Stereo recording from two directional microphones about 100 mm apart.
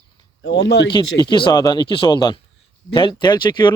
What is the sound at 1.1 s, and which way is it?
Speech, 50° left (ahead or behind).